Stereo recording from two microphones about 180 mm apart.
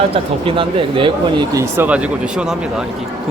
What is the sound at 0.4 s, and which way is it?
Speech, 30° right (ahead or behind).